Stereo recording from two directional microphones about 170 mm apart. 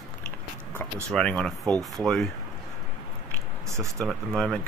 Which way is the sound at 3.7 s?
20° right (ahead or behind).